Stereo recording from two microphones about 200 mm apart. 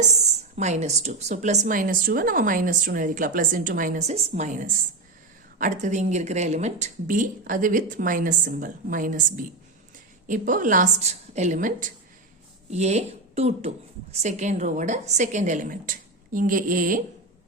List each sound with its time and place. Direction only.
0.1 s a woman's voice: 35° right (ahead or behind)